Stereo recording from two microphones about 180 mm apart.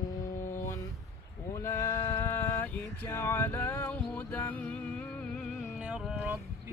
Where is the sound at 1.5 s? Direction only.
15° left (ahead or behind).